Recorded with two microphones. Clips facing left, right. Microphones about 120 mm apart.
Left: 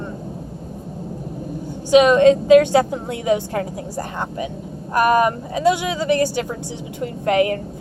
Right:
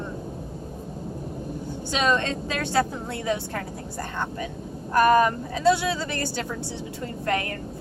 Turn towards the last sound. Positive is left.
turn(degrees=15)  # may be behind; listen again after turning